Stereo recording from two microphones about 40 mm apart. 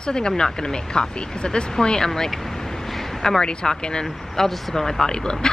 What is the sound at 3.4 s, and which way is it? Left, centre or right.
Speech, left.